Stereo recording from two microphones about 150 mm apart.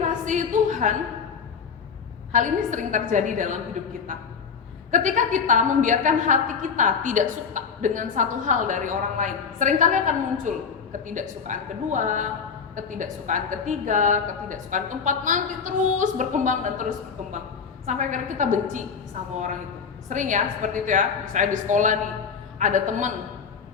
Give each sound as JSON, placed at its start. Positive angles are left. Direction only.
{"t": 0.3, "sound": "a sound", "side_deg": -55}
{"t": 2.3, "sound": "a woman's voice", "side_deg": -60}
{"t": 4.9, "sound": "a woman's voice", "side_deg": -60}
{"t": 20.1, "sound": "a woman's voice", "side_deg": -55}